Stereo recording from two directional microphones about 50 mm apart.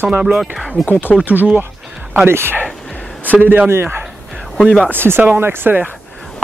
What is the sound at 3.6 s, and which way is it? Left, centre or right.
Speech, right.